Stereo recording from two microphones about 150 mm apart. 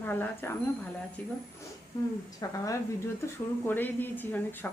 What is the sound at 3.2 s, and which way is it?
Speech, 15° left (ahead or behind).